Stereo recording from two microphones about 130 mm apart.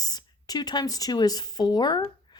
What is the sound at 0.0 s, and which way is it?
Speech, 30° left (ahead or behind).